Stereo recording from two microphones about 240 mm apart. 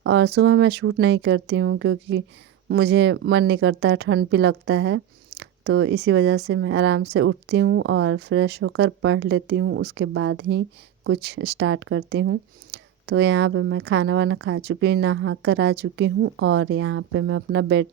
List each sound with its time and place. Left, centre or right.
0.0 s speech: right